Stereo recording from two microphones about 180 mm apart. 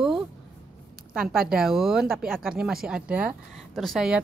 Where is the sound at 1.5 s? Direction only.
Centre (ahead or behind).